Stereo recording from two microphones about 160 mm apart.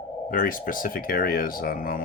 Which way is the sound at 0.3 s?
60° left (ahead or behind).